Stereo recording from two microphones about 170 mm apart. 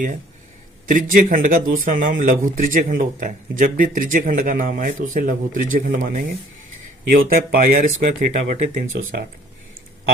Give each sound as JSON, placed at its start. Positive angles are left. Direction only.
{"t": 0.9, "sound": "speech", "side_deg": -50}